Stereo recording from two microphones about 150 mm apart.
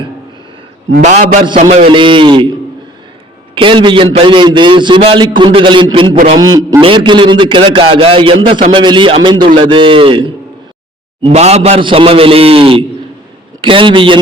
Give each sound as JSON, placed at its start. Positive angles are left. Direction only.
{"t": 1.0, "sound": "a sound", "side_deg": -60}
{"t": 1.5, "sound": "a man's voice", "side_deg": -45}
{"t": 3.5, "sound": "a man's voice", "side_deg": -35}